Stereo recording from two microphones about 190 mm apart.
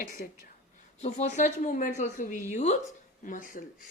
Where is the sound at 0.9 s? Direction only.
35° left (ahead or behind).